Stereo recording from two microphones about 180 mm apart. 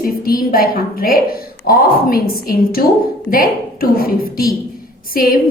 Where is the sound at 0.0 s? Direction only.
55° left (ahead or behind).